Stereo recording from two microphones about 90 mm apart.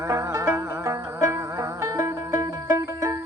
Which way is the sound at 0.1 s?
30° right (ahead or behind).